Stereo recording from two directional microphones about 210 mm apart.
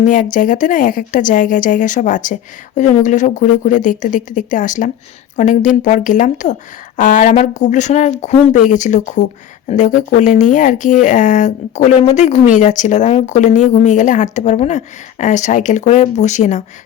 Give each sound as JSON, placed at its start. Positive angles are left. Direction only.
{"t": 0.0, "sound": "speech", "side_deg": 40}